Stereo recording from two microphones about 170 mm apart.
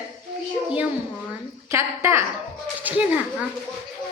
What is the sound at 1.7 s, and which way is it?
A woman's voice, 15° right (ahead or behind).